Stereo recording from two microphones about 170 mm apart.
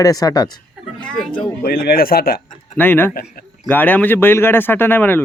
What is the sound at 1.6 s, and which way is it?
Speech, 60° left (ahead or behind).